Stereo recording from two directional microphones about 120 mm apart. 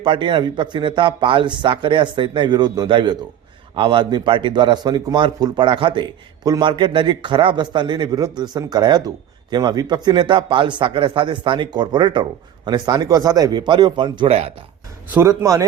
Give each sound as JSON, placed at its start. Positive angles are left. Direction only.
{"t": 0.0, "sound": "speech", "side_deg": -45}
{"t": 15.1, "sound": "speech", "side_deg": -20}